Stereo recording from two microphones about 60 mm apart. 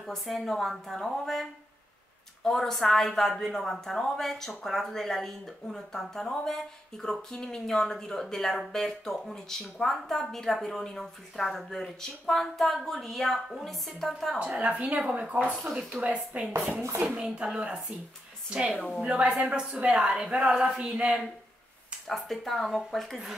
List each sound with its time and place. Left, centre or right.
0.0 s a woman's voice: centre
14.6 s a woman's voice: right
22.0 s a woman's voice: centre